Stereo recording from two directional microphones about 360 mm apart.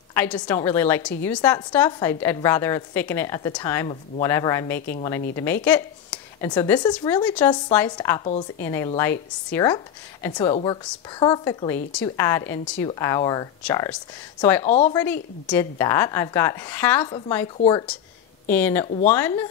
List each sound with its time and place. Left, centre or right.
0.1 s a woman's voice: centre
14.7 s a woman's voice: centre
15.4 s a woman's voice: centre